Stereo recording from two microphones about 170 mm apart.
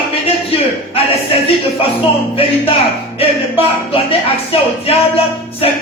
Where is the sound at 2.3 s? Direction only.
35° left (ahead or behind).